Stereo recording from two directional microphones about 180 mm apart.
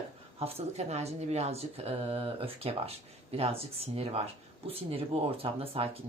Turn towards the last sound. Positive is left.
turn(degrees=-35)  # may be behind; listen again after turning